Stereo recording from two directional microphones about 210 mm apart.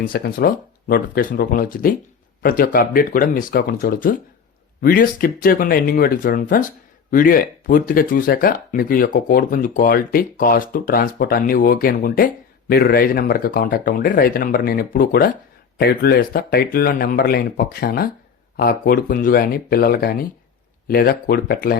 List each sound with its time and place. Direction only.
0.0 s speech: 45° left (ahead or behind)